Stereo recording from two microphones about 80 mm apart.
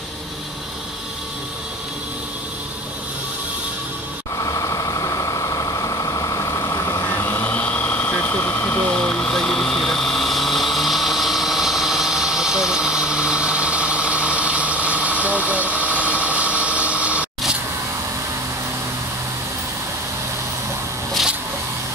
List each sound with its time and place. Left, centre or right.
4.4 s vehicle: left
7.2 s engine: left
8.9 s vehicle: centre